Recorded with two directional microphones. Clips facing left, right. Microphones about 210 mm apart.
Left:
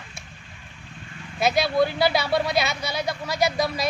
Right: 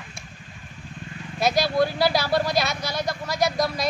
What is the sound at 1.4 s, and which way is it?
Speech, centre (ahead or behind).